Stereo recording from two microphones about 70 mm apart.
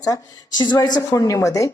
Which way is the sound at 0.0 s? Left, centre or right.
Left.